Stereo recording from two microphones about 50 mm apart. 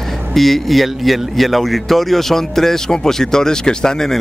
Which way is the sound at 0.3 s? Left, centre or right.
Centre.